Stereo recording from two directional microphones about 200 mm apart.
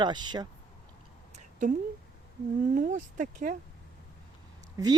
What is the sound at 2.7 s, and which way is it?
Speech, 40° right (ahead or behind).